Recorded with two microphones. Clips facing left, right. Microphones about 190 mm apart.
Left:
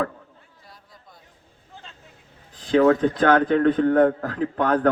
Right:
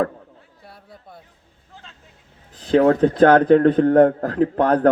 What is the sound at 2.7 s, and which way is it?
A man's voice, 40° right (ahead or behind).